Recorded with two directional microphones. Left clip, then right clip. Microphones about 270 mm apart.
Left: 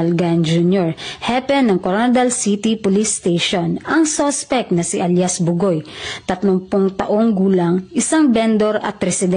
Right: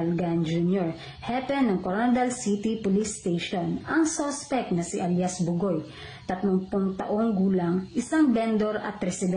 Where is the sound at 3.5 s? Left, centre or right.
Left.